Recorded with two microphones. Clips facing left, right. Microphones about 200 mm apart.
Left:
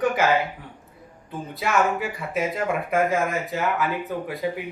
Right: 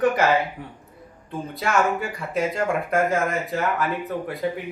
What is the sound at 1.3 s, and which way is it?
Speech, centre (ahead or behind).